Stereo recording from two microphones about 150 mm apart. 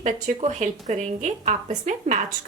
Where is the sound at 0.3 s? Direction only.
50° right (ahead or behind).